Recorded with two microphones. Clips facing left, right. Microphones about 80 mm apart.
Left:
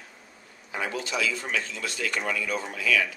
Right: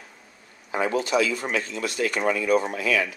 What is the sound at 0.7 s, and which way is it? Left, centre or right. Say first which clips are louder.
Speech: right 7 dB; right.